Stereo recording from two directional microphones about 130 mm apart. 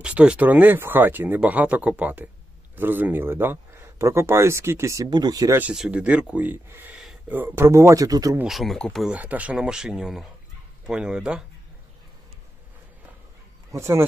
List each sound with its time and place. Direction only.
0.0 s speech: 10° right (ahead or behind); by 5.6 s 30° right (ahead or behind)
5.6 s speech: 10° right (ahead or behind); by 8.4 s 25° right (ahead or behind)
8.5 s speech: centre (ahead or behind)
9.1 s speech: 10° right (ahead or behind)
13.7 s speech: 20° right (ahead or behind)